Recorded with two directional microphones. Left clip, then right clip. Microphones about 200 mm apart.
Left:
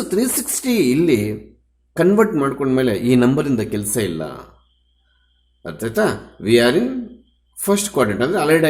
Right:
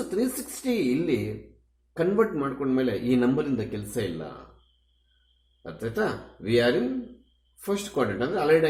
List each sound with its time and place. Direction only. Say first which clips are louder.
0.1 s a man's voice: left 11 dB; 45° left (ahead or behind)
5.6 s a man's voice: left 9 dB; 45° left (ahead or behind)